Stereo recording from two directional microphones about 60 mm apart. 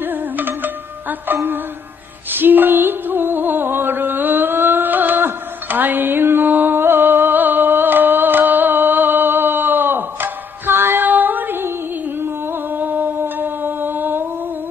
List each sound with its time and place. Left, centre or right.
1.3 s music: right
12.7 s music: right